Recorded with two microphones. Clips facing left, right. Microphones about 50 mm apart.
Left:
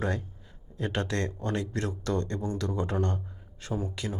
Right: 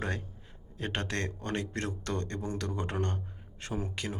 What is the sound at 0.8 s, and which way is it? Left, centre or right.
Speech, right.